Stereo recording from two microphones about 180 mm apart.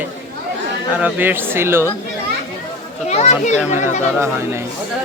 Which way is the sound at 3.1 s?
40° left (ahead or behind).